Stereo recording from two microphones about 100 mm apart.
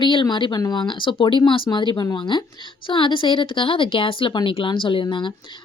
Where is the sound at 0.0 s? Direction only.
50° left (ahead or behind).